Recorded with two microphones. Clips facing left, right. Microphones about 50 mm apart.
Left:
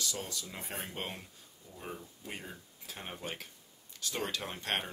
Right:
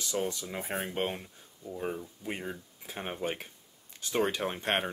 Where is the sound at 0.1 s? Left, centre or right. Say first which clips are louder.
Right 8 dB; right.